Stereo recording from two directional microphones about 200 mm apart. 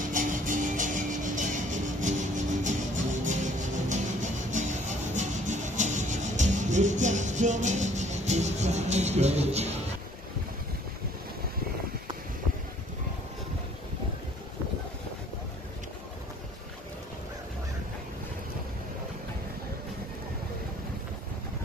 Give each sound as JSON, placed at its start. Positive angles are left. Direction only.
{"t": 0.1, "sound": "music", "side_deg": -40}